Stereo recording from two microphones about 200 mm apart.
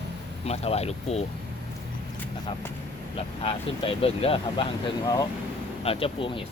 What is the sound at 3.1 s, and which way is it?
Speech, 30° left (ahead or behind).